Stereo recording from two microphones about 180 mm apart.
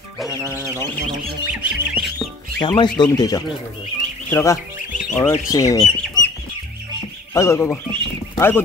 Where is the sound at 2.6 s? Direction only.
25° left (ahead or behind).